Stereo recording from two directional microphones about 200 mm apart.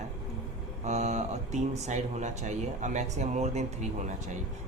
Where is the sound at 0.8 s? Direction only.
35° right (ahead or behind).